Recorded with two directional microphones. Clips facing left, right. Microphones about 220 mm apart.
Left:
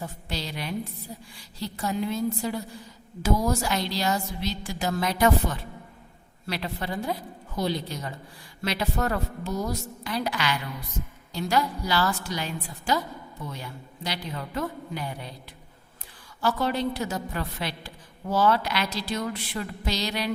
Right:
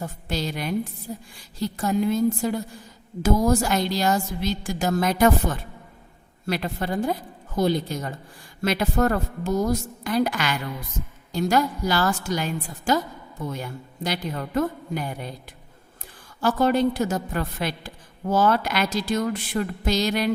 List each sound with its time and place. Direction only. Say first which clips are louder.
0.0 s a woman's voice: right 5 dB; 50° right (ahead or behind)
16.4 s a woman's voice: right 6 dB; 50° right (ahead or behind)